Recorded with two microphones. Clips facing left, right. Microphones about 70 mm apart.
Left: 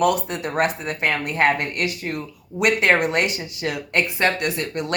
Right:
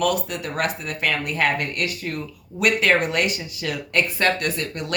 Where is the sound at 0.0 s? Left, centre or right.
Left.